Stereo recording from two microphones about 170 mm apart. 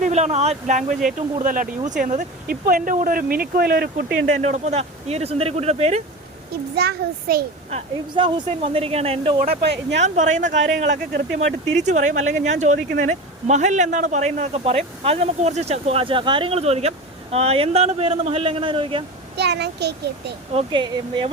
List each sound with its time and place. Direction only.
0.0 s speech: 40° right (ahead or behind); by 4.0 s 65° right (ahead or behind)
4.3 s speech: 45° right (ahead or behind)
6.7 s a child's voice: 65° right (ahead or behind)
7.7 s speech: 30° right (ahead or behind)
10.0 s speech: 45° right (ahead or behind); by 19.0 s 30° right (ahead or behind)
19.4 s a child's voice: 80° right
20.5 s speech: 30° right (ahead or behind)